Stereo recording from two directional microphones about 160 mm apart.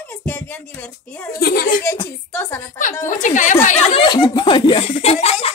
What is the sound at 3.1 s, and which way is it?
A woman's voice, 50° left (ahead or behind).